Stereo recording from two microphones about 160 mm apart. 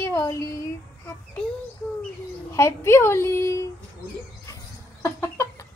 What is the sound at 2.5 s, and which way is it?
A woman's voice, 15° left (ahead or behind).